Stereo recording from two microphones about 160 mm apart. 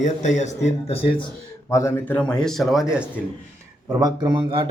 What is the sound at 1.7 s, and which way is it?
A man's voice, 15° left (ahead or behind).